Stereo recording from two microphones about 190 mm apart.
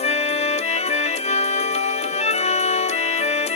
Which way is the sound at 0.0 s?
35° left (ahead or behind).